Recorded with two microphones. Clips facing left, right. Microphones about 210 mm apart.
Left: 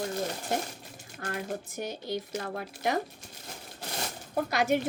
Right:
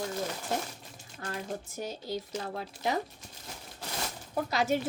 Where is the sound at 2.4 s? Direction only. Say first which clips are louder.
Left 2 dB; 55° left (ahead or behind).